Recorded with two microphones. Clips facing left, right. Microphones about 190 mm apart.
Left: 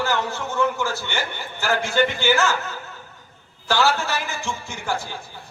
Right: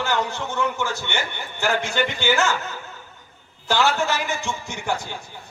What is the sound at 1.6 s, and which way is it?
Speech, 20° right (ahead or behind).